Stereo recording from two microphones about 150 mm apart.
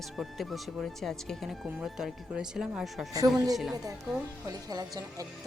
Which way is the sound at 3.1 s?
25° right (ahead or behind).